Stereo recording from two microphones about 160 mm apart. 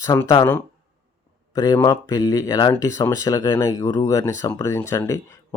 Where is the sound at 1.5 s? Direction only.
25° left (ahead or behind).